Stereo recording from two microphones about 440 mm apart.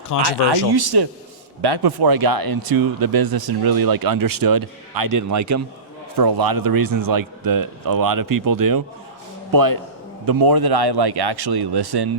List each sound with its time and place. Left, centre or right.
0.3 s speech: right
6.1 s speech: right